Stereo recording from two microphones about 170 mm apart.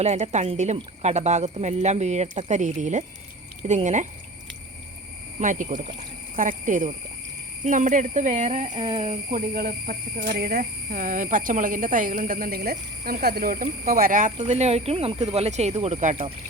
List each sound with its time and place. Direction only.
0.0 s speech: 40° right (ahead or behind)
5.4 s speech: 50° right (ahead or behind)
8.6 s speech: 30° right (ahead or behind)
9.6 s speech: 55° right (ahead or behind)
10.3 s speech: 65° right (ahead or behind); by 16.1 s 45° right (ahead or behind)